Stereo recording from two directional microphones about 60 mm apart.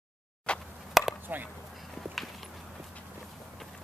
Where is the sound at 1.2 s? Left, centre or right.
Right.